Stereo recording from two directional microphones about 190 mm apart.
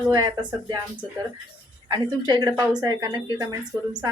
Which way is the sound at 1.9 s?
20° right (ahead or behind).